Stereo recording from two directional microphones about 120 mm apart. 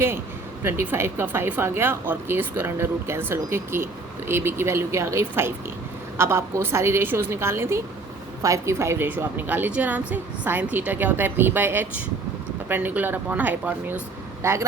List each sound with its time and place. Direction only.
0.6 s a woman's voice: 20° right (ahead or behind)